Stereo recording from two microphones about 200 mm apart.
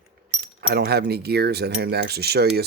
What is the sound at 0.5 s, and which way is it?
Speech, 55° right (ahead or behind).